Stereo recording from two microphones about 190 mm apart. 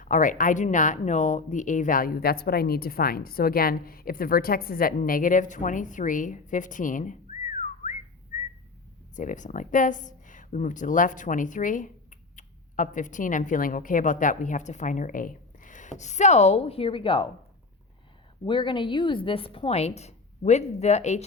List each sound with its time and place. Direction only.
0.0 s speech: 45° left (ahead or behind)
8.3 s whistling: 40° left (ahead or behind)
9.1 s speech: 40° left (ahead or behind)
18.4 s speech: 25° left (ahead or behind)